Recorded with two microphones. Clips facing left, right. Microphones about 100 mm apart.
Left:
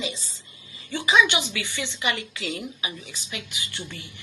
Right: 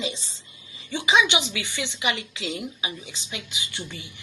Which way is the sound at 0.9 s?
15° right (ahead or behind).